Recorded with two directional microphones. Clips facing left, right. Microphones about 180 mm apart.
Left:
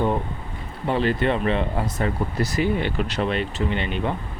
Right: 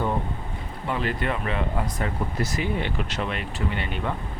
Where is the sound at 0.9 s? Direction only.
30° left (ahead or behind).